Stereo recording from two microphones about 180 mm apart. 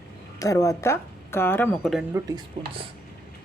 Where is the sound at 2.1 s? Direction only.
20° right (ahead or behind).